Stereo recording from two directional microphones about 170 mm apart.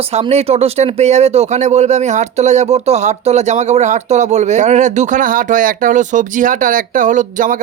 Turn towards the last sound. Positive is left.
turn(degrees=-50)  # may be behind; listen again after turning